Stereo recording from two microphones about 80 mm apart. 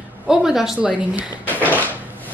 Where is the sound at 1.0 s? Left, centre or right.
Centre.